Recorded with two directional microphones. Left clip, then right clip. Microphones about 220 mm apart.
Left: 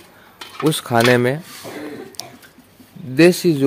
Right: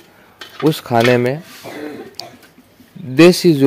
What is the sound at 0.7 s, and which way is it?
Speech, 10° right (ahead or behind).